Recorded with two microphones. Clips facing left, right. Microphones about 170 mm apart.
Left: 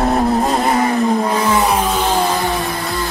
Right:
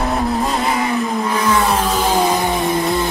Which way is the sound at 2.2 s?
20° right (ahead or behind).